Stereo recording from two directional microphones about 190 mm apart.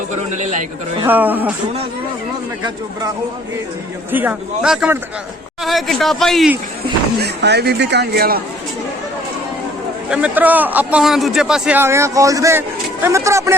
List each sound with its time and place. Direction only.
0.1 s a man's voice: 40° right (ahead or behind)
1.0 s a man's voice: 10° right (ahead or behind)
4.1 s a man's voice: 10° right (ahead or behind)
7.2 s speech: 60° right (ahead or behind)
10.1 s a man's voice: 5° right (ahead or behind)